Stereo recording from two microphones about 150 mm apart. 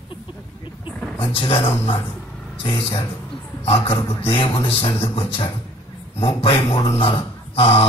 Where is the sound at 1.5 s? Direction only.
40° left (ahead or behind).